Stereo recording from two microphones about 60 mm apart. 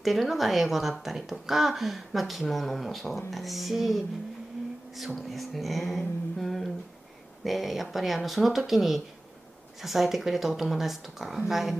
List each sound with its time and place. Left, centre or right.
0.0 s a woman's voice: centre